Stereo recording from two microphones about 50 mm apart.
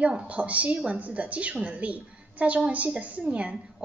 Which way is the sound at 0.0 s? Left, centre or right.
Right.